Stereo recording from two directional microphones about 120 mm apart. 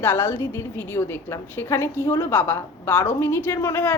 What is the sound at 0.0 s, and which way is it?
A woman's voice, 20° left (ahead or behind).